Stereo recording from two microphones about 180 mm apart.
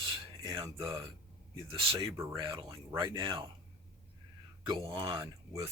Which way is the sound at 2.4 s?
25° right (ahead or behind).